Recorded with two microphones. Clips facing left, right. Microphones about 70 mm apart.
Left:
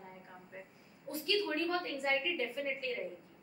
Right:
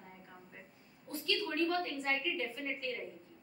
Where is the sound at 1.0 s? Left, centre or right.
Centre.